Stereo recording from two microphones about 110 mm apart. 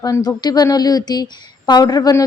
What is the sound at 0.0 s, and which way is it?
Speech, 35° left (ahead or behind).